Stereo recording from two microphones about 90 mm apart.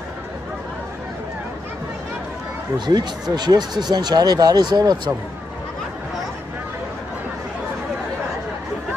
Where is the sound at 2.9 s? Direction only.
50° right (ahead or behind).